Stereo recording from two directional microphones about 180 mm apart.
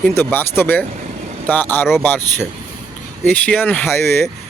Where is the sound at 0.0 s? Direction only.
10° left (ahead or behind).